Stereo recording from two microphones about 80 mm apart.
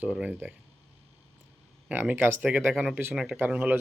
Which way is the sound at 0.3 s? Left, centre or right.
Right.